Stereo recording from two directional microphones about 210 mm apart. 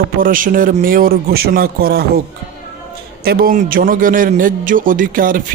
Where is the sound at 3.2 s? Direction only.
45° right (ahead or behind).